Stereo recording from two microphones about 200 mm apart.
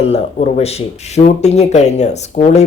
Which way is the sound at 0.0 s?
30° left (ahead or behind).